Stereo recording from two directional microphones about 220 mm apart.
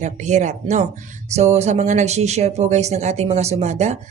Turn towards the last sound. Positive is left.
turn(degrees=-30)  # may be behind; listen again after turning